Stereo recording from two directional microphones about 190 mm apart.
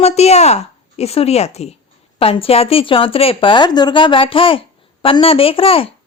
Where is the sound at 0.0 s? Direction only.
35° left (ahead or behind).